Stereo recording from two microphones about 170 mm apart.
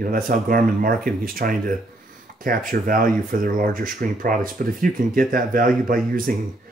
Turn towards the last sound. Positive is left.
turn(degrees=-55)  # may be behind; listen again after turning